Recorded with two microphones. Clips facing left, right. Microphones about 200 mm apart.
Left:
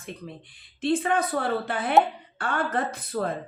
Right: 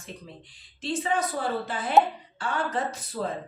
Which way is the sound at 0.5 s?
60° left (ahead or behind).